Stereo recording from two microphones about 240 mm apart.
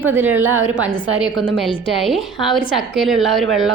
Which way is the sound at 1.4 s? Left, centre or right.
Left.